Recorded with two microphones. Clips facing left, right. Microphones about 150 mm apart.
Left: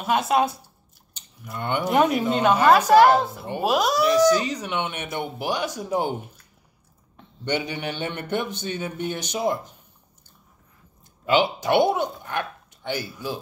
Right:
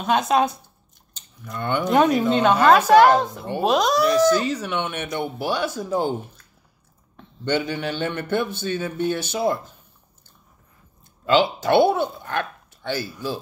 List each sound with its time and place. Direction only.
0.0 s speech: 5° left (ahead or behind)
7.4 s speech: 15° left (ahead or behind)
11.2 s speech: 15° left (ahead or behind)